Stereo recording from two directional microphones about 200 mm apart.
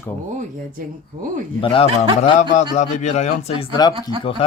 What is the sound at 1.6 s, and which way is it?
Speech, 25° left (ahead or behind).